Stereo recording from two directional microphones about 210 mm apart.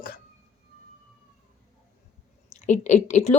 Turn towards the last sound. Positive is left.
turn(degrees=35)  # may be behind; listen again after turning